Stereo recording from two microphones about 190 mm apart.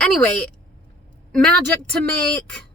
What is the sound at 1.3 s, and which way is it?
Speech, 5° left (ahead or behind).